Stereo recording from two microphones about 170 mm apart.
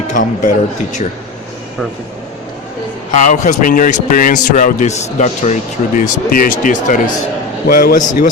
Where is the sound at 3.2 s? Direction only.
45° left (ahead or behind).